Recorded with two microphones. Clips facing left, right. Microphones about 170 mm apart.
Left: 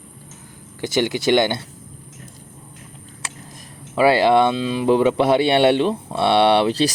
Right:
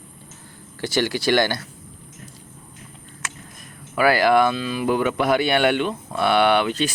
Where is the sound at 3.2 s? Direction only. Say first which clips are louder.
Right 1 dB; 30° left (ahead or behind).